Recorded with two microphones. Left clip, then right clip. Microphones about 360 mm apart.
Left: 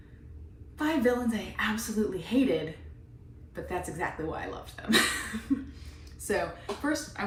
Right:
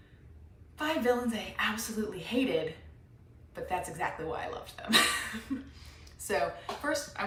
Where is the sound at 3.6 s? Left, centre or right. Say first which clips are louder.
Even; centre.